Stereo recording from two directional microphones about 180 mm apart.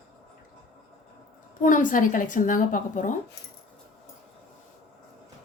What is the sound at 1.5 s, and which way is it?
A woman's voice, 45° left (ahead or behind).